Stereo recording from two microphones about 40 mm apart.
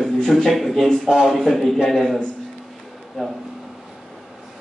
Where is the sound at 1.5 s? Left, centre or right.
Centre.